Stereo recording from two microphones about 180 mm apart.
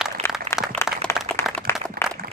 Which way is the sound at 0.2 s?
35° right (ahead or behind).